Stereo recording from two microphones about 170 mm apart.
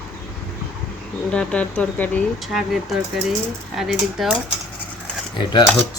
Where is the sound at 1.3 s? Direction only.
5° left (ahead or behind).